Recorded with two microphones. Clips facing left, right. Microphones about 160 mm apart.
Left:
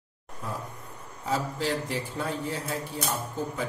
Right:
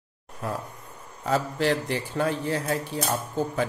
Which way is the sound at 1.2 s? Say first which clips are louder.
Right 5 dB; 70° right (ahead or behind).